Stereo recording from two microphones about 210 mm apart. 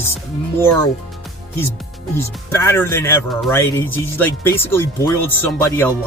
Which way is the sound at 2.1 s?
10° left (ahead or behind).